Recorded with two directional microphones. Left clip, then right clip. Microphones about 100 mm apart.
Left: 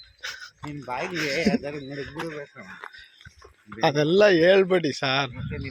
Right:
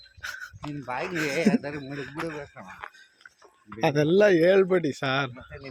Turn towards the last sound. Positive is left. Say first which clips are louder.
# left 2 dB
turn(degrees=-30)  # may be behind; listen again after turning